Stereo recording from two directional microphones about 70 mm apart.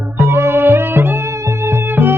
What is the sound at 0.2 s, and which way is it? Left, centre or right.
Music, right.